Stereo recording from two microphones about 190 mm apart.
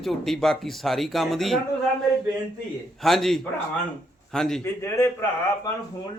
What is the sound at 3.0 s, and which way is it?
A man's voice, centre (ahead or behind).